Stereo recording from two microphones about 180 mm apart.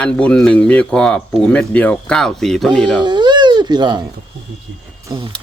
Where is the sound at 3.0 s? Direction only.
25° right (ahead or behind).